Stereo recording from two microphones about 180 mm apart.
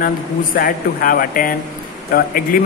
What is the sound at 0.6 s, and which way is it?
Speech, 55° left (ahead or behind).